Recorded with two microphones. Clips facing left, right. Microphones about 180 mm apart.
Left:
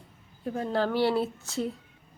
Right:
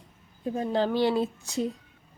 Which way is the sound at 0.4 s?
20° right (ahead or behind).